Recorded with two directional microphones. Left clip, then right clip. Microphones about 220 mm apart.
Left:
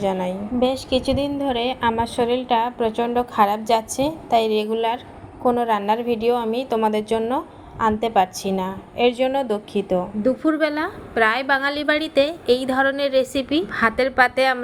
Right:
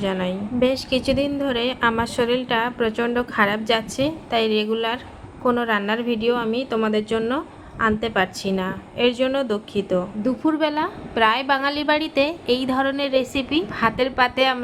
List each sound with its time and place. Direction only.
0.0 s a woman's voice: 10° left (ahead or behind)
0.6 s a woman's voice: 35° right (ahead or behind)
1.4 s a woman's voice: 5° right (ahead or behind)
4.3 s a woman's voice: 30° right (ahead or behind)
4.7 s a woman's voice: centre (ahead or behind)